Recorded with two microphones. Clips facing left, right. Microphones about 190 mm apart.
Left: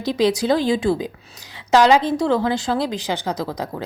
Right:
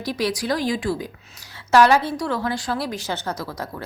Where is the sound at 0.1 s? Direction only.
20° left (ahead or behind).